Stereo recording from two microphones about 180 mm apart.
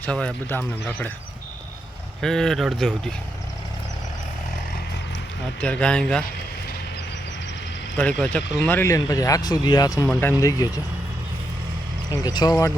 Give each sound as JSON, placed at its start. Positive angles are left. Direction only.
{"t": 0.0, "sound": "speech", "side_deg": 5}
{"t": 2.2, "sound": "speech", "side_deg": 5}
{"t": 5.5, "sound": "speech", "side_deg": 5}
{"t": 8.2, "sound": "speech", "side_deg": 5}
{"t": 12.2, "sound": "speech", "side_deg": 25}